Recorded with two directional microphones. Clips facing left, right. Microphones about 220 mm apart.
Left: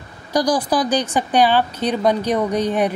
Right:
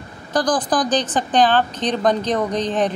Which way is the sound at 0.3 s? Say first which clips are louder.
Left 1 dB; 10° left (ahead or behind).